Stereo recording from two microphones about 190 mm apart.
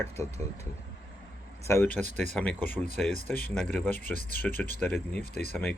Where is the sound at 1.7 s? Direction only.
10° left (ahead or behind).